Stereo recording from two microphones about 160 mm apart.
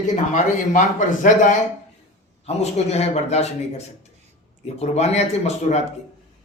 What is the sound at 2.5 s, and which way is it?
Speech, 40° left (ahead or behind).